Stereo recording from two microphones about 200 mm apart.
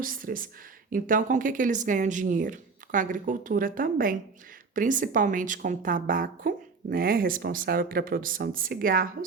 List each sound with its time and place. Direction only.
0.0 s speech: 45° right (ahead or behind)